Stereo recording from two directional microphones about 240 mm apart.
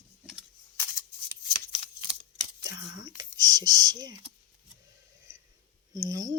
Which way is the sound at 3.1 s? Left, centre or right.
Centre.